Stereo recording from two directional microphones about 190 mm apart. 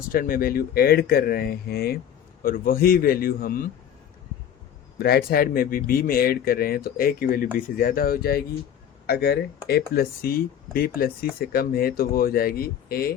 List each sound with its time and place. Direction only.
0.1 s speech: 50° left (ahead or behind)
4.9 s speech: 55° left (ahead or behind)